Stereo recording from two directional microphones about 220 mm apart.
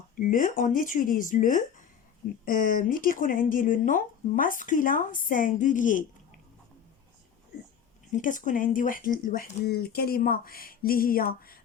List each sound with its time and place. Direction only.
0.2 s speech: 40° left (ahead or behind)
8.1 s speech: 35° left (ahead or behind)